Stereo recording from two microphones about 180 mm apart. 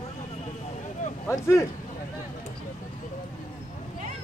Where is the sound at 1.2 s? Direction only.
15° left (ahead or behind).